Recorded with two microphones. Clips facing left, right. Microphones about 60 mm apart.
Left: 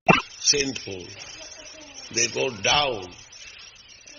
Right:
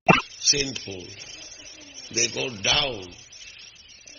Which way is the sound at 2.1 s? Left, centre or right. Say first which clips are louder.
Left 3 dB; left.